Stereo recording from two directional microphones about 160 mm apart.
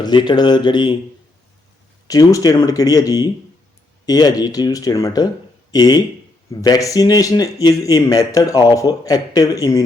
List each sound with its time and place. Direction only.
0.0 s a man's voice: 30° left (ahead or behind)
2.0 s a man's voice: 25° left (ahead or behind)